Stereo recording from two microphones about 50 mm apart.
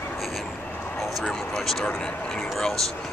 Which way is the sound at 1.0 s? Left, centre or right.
Centre.